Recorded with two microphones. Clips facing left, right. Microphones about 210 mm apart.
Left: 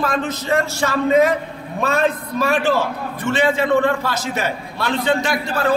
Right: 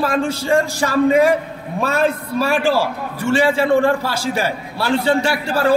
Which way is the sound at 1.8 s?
10° right (ahead or behind).